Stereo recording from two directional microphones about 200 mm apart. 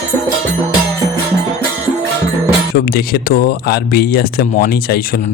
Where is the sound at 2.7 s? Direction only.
50° left (ahead or behind).